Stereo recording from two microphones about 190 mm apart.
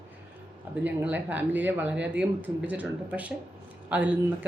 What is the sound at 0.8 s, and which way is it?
Speech, 10° right (ahead or behind).